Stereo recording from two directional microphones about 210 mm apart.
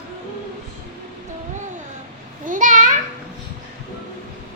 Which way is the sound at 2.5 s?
40° right (ahead or behind).